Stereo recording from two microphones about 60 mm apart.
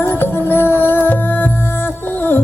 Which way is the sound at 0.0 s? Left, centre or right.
Left.